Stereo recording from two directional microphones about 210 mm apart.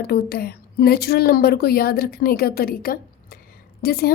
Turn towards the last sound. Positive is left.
turn(degrees=45)  # may be behind; listen again after turning